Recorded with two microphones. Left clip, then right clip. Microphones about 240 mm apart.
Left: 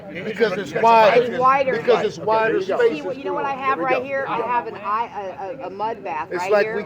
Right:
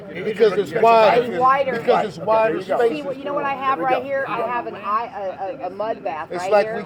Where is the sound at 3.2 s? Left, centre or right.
Centre.